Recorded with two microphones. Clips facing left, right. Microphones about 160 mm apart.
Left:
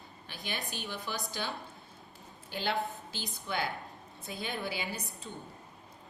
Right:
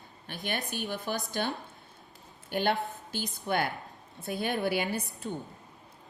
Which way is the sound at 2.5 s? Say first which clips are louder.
Right 5 dB; 55° right (ahead or behind).